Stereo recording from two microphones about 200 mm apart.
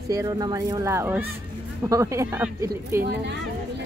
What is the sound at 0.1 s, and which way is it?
Speech, 20° right (ahead or behind).